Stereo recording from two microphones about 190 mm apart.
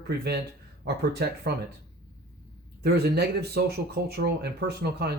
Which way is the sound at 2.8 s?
55° right (ahead or behind).